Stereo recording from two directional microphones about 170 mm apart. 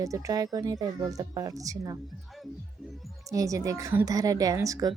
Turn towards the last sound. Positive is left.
turn(degrees=-20)  # may be behind; listen again after turning